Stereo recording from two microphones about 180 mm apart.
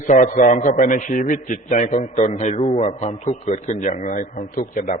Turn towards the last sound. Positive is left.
turn(degrees=50)  # may be behind; listen again after turning